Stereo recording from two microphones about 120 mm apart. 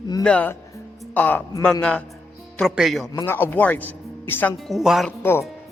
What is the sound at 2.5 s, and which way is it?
Speech, centre (ahead or behind).